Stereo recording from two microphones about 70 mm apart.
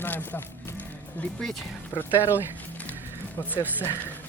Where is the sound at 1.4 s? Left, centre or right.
Centre.